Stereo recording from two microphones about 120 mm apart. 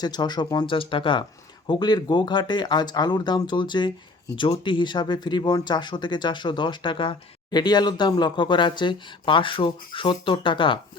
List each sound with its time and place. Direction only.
0.0 s speech: 35° left (ahead or behind)